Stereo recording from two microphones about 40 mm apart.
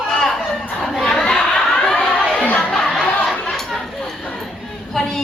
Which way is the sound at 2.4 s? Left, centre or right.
Left.